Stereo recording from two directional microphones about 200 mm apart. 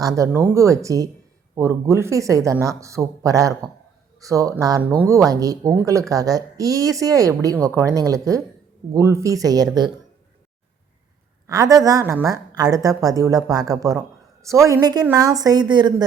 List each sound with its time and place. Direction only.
0.0 s speech: 15° right (ahead or behind)
11.4 s speech: 15° right (ahead or behind)